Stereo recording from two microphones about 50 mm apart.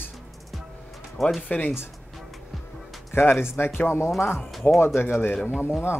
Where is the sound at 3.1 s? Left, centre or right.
Left.